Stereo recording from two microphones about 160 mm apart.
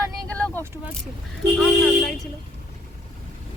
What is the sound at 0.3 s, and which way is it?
Vehicle, 5° left (ahead or behind).